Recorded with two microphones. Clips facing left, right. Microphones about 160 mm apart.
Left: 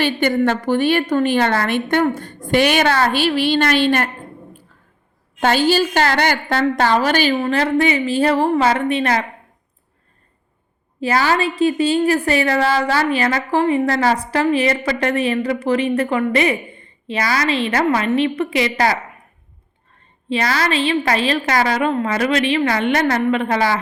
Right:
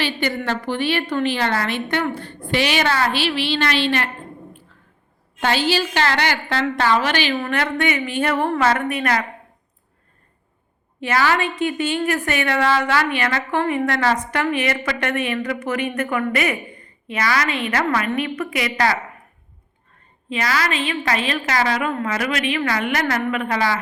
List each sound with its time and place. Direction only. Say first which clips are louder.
0.0 s a woman's voice: left 7 dB; 45° left (ahead or behind)
5.4 s a woman's voice: left 5 dB; 45° left (ahead or behind)
7.3 s a woman's voice: left 5 dB; 30° left (ahead or behind)
11.0 s a woman's voice: left 2 dB; 35° left (ahead or behind)
20.3 s a woman's voice: left 3 dB; 35° left (ahead or behind)